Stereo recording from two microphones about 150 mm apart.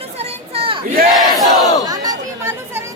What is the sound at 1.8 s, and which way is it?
Chatter, 25° right (ahead or behind).